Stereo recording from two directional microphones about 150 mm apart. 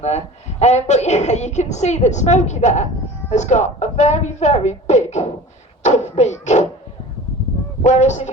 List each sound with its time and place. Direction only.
0.6 s a woman's voice: 50° left (ahead or behind)
7.9 s a woman's voice: 50° left (ahead or behind)